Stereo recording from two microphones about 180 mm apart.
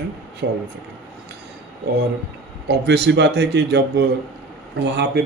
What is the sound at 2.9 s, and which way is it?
A man's voice, 75° right (ahead or behind).